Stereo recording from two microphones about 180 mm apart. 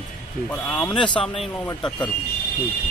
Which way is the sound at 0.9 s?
25° left (ahead or behind).